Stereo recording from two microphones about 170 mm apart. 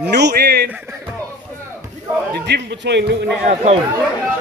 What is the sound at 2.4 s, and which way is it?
Speech, 85° right.